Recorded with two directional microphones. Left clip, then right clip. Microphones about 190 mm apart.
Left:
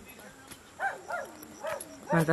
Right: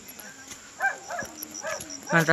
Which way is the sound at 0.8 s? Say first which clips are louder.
Right 5 dB; 30° left (ahead or behind).